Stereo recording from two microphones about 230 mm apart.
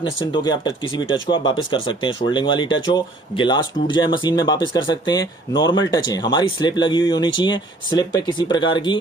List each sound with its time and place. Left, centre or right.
0.4 s speech: centre